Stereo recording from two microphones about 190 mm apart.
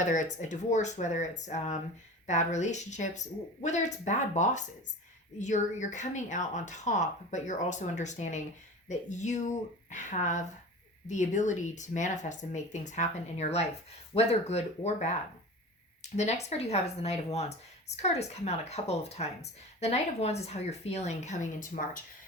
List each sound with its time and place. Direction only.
0.0 s speech: 40° left (ahead or behind)